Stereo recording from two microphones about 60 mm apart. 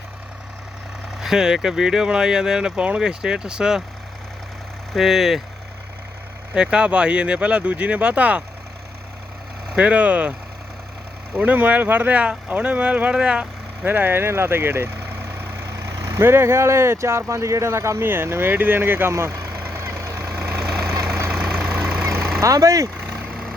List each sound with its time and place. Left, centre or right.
1.2 s speech: centre
4.9 s speech: centre
6.5 s speech: centre
9.7 s speech: right
11.3 s speech: right
13.8 s speech: right
15.7 s vehicle: right
16.2 s speech: right
18.0 s speech: right
19.1 s speech: right
19.4 s vehicle: right
20.6 s vehicle: centre
22.0 s vehicle: right
22.4 s speech: right